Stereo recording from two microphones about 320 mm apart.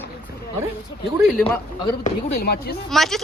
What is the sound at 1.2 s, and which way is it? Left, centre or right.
Speech, centre.